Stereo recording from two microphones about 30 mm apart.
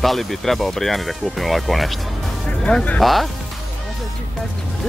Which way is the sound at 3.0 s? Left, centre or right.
Centre.